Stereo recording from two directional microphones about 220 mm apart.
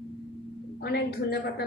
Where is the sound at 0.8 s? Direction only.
45° left (ahead or behind).